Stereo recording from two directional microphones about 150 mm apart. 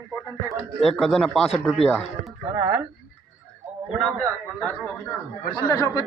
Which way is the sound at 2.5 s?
25° right (ahead or behind).